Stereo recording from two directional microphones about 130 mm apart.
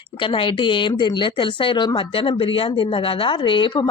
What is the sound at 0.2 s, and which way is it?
A woman's voice, 40° left (ahead or behind).